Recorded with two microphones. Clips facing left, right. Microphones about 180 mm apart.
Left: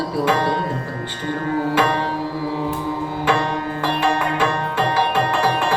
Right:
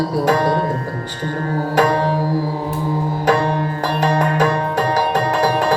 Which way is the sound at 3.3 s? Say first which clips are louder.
Right 4 dB; 40° right (ahead or behind).